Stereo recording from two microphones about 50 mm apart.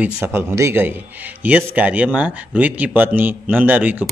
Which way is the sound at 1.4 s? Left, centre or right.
Right.